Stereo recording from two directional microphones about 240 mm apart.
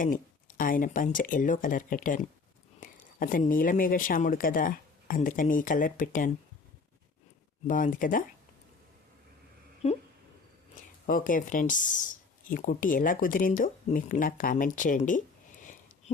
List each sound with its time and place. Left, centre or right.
0.0 s speech: left
7.7 s speech: left
9.8 s speech: left
11.0 s speech: left